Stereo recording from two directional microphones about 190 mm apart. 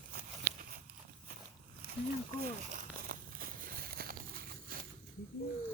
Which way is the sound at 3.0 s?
50° right (ahead or behind).